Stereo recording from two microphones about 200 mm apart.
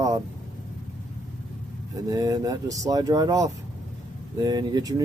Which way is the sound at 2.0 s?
15° right (ahead or behind).